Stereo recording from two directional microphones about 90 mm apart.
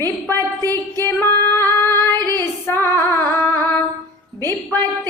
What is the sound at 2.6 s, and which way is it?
Female singing, 30° left (ahead or behind).